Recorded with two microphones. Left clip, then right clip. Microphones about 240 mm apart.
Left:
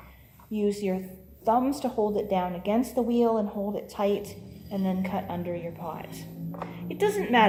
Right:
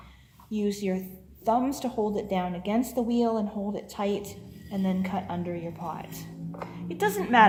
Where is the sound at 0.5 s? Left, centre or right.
Right.